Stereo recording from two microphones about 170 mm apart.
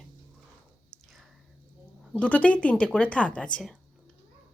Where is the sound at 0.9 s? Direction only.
Centre (ahead or behind).